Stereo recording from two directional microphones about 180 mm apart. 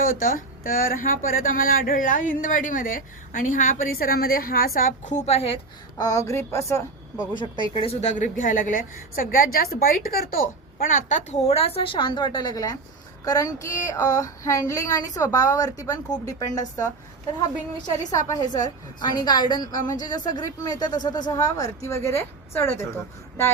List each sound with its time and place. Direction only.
0.0 s speech: 50° left (ahead or behind)
6.0 s a woman's voice: 20° left (ahead or behind)
18.1 s speech: 20° left (ahead or behind)